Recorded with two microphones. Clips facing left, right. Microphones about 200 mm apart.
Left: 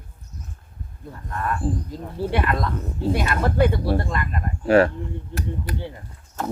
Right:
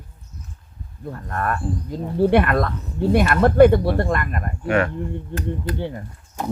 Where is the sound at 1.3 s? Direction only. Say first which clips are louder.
Even; 55° right (ahead or behind).